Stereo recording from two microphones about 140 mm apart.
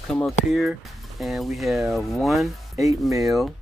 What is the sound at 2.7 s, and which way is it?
Speech, 25° right (ahead or behind).